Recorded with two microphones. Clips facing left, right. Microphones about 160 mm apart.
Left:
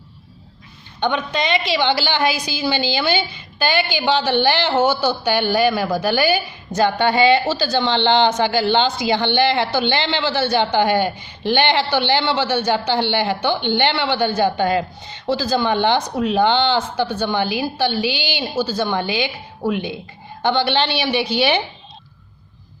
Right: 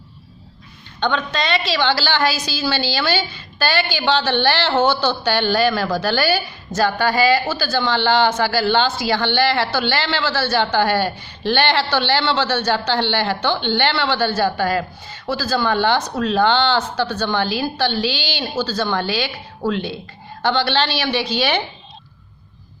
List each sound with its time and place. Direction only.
0.9 s a woman's voice: 15° left (ahead or behind)